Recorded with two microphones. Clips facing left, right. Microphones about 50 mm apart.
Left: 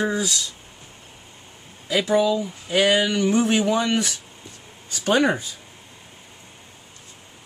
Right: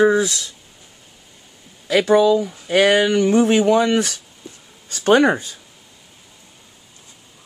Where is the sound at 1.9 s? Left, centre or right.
Right.